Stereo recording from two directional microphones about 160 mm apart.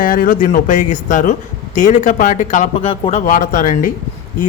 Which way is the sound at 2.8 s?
35° left (ahead or behind).